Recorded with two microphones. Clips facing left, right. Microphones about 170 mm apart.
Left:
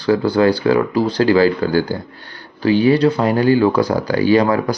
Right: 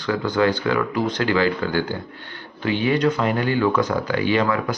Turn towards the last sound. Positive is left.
turn(degrees=35)  # may be behind; listen again after turning